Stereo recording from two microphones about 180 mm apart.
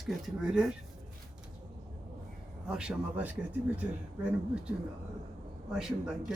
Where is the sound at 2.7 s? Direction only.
5° right (ahead or behind).